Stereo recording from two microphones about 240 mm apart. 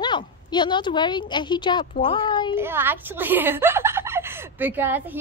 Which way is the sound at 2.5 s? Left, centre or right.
Centre.